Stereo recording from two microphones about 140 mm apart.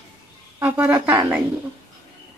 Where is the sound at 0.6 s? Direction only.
15° right (ahead or behind).